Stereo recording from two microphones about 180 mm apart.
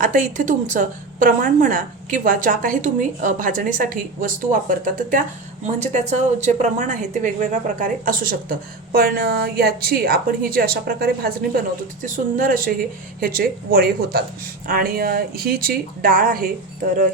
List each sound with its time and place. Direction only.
0.0 s a woman's voice: 45° right (ahead or behind)
5.6 s a woman's voice: 40° right (ahead or behind)